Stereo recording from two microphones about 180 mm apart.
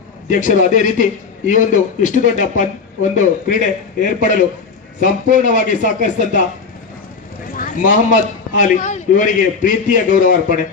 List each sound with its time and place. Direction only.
0.3 s a man's voice: 45° left (ahead or behind)
7.5 s a man's voice: 45° left (ahead or behind)